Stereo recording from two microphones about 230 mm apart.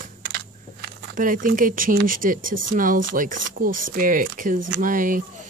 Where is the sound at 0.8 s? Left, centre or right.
Right.